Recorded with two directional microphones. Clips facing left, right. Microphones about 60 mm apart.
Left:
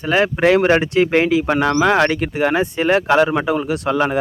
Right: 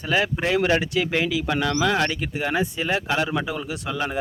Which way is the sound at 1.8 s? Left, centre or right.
Left.